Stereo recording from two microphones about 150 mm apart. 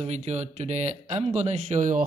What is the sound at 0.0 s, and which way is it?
Speech, 45° right (ahead or behind).